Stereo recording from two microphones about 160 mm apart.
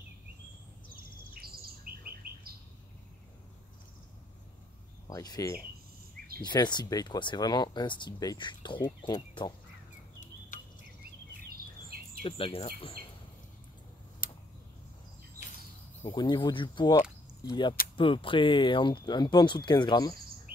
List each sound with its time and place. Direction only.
1.3 s bird: 70° right (ahead or behind)
5.0 s speech: 25° left (ahead or behind)
11.4 s a sound: 70° right (ahead or behind)
12.2 s speech: 35° left (ahead or behind)
14.2 s tick-tock: 65° left (ahead or behind)
16.1 s speech: 30° left (ahead or behind)
20.5 s bird: 65° right (ahead or behind)